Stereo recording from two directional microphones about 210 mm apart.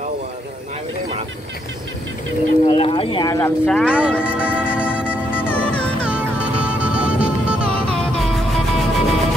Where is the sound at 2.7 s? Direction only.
25° left (ahead or behind).